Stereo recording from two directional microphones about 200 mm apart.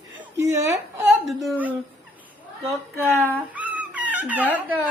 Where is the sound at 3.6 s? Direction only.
10° right (ahead or behind).